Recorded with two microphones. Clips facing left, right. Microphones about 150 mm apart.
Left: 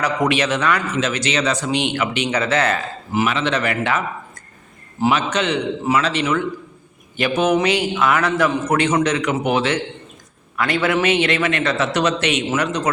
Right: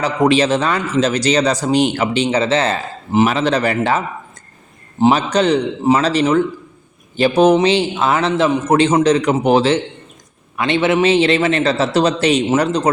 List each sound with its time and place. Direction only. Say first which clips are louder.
0.0 s a man's voice: right 5 dB; 30° right (ahead or behind)
3.2 s a man's voice: right 4 dB; 40° right (ahead or behind)